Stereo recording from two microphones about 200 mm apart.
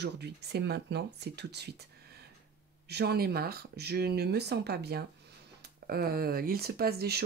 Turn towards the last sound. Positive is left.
turn(degrees=-50)  # may be behind; listen again after turning